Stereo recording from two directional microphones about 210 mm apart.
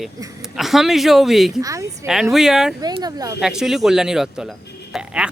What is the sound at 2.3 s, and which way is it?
Speech, centre (ahead or behind).